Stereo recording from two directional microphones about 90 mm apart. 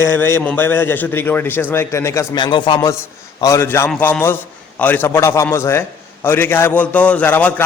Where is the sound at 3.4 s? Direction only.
40° left (ahead or behind).